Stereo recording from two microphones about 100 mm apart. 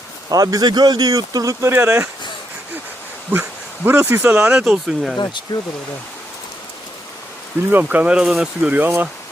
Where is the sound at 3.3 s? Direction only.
20° right (ahead or behind).